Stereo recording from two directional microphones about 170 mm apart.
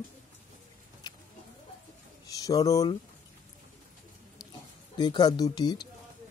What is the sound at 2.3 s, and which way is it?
Speech, 20° left (ahead or behind).